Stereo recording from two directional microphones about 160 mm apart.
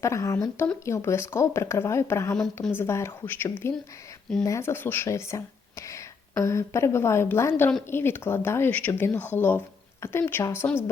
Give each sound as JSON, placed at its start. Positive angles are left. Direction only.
{"t": 0.0, "sound": "speech", "side_deg": 20}
{"t": 6.4, "sound": "speech", "side_deg": 15}